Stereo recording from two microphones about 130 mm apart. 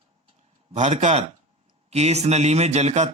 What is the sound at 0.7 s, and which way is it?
A man's voice, 60° right (ahead or behind).